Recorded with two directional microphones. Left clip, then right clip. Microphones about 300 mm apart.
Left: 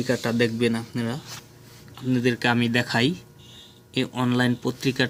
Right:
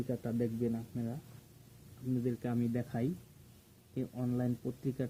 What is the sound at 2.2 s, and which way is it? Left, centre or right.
Speech, left.